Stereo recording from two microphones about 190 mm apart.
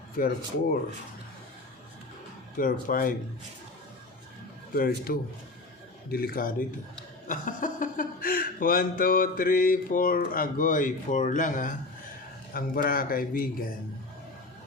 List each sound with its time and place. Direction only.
2.6 s speech: 45° left (ahead or behind)
4.7 s speech: 50° left (ahead or behind)